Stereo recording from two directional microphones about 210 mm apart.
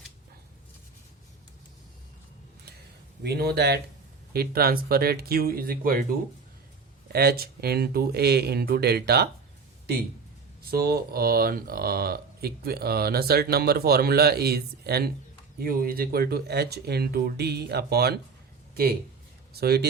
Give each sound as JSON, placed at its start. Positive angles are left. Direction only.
{"t": 3.2, "sound": "speech", "side_deg": -50}
{"t": 10.7, "sound": "speech", "side_deg": -45}